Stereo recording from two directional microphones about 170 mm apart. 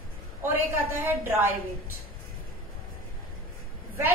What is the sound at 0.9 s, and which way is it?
Speech, 10° right (ahead or behind).